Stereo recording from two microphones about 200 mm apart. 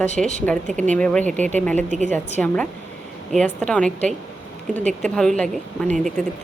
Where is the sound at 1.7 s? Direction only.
40° right (ahead or behind).